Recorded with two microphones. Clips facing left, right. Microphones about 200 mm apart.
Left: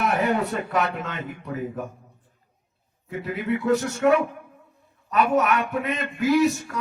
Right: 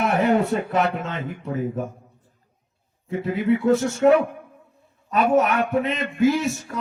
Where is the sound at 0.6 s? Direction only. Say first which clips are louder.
Right 3 dB; 25° right (ahead or behind).